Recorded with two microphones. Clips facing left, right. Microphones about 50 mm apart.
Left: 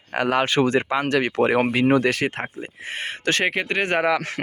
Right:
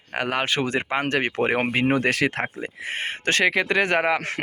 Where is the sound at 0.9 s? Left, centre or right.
Right.